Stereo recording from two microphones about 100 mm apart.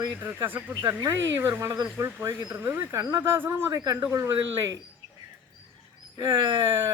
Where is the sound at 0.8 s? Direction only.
35° right (ahead or behind).